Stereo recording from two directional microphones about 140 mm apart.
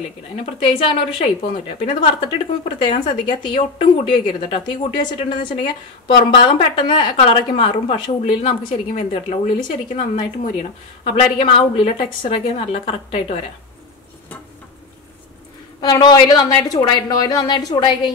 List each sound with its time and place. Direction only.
0.4 s a woman's voice: 45° left (ahead or behind)
11.1 s a woman's voice: 40° left (ahead or behind)
15.8 s a woman's voice: 30° left (ahead or behind)